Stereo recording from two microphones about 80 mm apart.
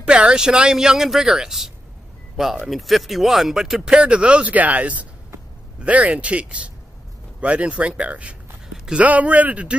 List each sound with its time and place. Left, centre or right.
0.0 s speech: centre